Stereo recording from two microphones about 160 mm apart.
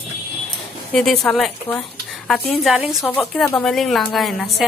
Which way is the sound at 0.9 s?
5° left (ahead or behind).